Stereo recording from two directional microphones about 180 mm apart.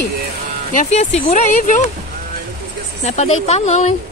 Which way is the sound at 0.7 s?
35° left (ahead or behind).